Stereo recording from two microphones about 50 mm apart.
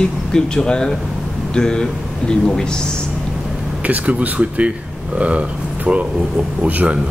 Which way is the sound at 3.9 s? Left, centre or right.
Right.